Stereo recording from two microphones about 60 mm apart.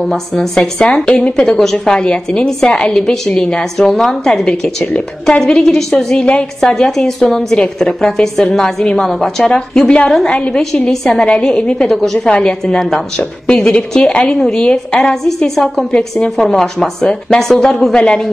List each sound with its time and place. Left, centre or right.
0.0 s a woman's voice: centre
1.4 s a woman's voice: centre
11.2 s a woman's voice: centre